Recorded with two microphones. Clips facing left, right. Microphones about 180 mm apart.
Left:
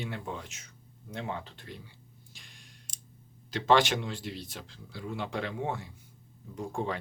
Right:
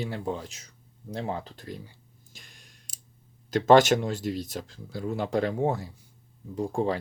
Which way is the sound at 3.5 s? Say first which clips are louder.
Right 7 dB; 45° right (ahead or behind).